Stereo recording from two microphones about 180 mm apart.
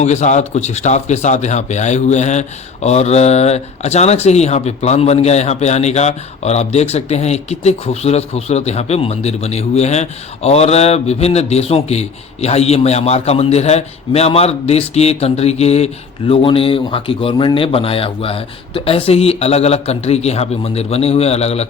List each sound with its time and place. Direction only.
0.0 s a man's voice: 40° left (ahead or behind)